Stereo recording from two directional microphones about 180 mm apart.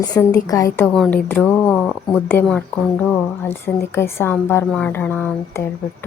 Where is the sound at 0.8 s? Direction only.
5° left (ahead or behind).